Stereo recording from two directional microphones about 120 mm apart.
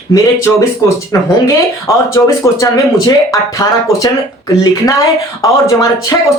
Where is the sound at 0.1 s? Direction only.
25° left (ahead or behind).